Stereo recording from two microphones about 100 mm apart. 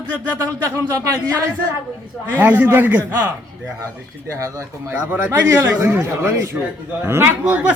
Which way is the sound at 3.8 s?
30° right (ahead or behind).